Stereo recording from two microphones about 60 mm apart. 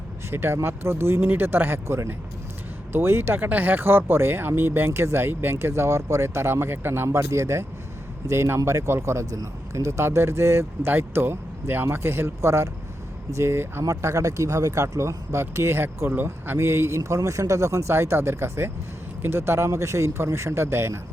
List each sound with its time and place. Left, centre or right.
0.3 s speech: right
7.2 s speech: right
13.8 s speech: right